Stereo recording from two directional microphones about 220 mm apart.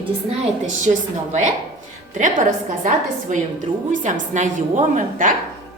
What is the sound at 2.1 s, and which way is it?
A woman's voice, 35° right (ahead or behind).